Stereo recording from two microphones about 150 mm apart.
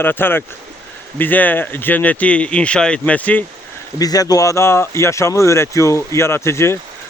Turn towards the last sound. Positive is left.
turn(degrees=20)  # may be behind; listen again after turning